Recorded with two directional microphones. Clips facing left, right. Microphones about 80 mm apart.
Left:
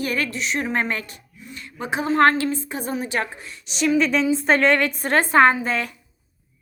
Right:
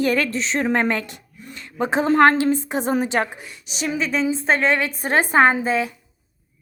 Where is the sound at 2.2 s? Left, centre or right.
Right.